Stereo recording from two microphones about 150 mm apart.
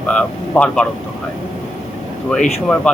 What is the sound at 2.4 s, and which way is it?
Speech, 45° left (ahead or behind).